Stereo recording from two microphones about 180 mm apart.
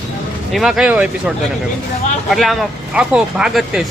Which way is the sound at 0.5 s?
Centre (ahead or behind).